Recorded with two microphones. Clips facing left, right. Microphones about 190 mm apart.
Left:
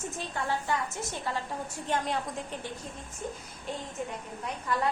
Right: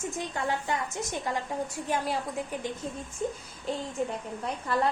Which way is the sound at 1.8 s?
5° right (ahead or behind).